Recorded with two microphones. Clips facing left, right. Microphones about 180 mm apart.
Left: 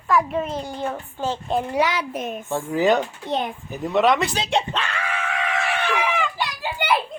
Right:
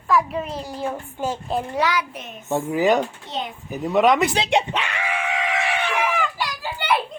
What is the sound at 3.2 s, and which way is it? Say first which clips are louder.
Speech: left 5 dB; 50° left (ahead or behind).